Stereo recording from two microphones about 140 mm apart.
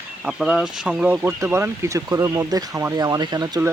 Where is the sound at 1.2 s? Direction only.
20° right (ahead or behind).